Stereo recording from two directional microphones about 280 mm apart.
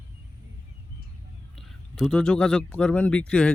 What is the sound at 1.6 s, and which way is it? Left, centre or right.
Speech, centre.